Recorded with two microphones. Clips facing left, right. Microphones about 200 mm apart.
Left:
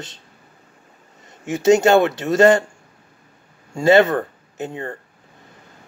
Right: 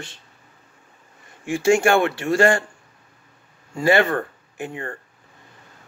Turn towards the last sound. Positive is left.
turn(degrees=20)  # may be behind; listen again after turning